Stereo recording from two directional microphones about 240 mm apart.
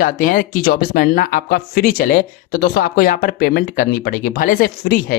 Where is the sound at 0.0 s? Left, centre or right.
Left.